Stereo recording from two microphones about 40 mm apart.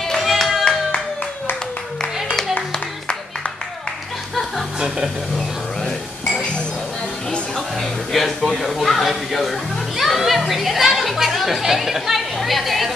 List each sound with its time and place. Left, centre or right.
0.2 s clapping: centre
4.7 s speech: centre
5.8 s chink: centre
7.7 s a man's voice: centre